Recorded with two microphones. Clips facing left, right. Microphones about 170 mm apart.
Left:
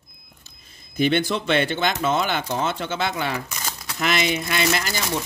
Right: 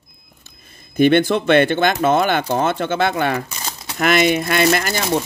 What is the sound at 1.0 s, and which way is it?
A man's voice, 55° right (ahead or behind).